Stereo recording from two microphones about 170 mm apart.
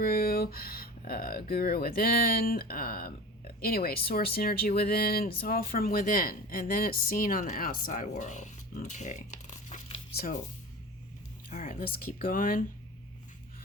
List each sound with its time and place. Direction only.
0.0 s speech: 65° left (ahead or behind); by 10.0 s 45° left (ahead or behind)
11.4 s speech: 50° left (ahead or behind)